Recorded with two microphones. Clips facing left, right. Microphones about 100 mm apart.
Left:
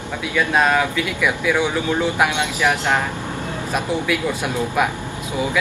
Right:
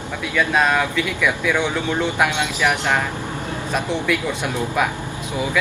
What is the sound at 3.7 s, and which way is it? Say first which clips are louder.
Speech: even; 5° left (ahead or behind).